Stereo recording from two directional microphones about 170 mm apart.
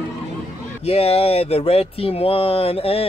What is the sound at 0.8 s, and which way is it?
Speech, 35° left (ahead or behind).